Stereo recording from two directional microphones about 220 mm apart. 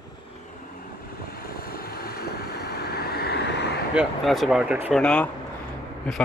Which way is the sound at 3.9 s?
Centre (ahead or behind).